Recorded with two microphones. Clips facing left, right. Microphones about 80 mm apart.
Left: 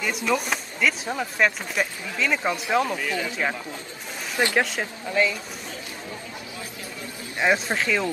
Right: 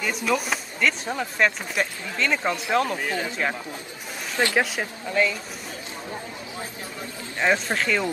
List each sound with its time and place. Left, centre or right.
0.0 s speech: centre
3.0 s speech: right
4.6 s speech: centre
7.3 s speech: centre